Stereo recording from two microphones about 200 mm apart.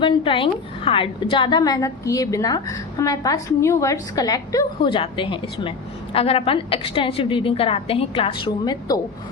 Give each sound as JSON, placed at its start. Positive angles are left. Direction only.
{"t": 0.0, "sound": "a woman's voice", "side_deg": 25}